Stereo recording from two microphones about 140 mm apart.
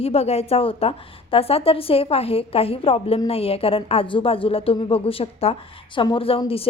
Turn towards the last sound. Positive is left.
turn(degrees=40)  # may be behind; listen again after turning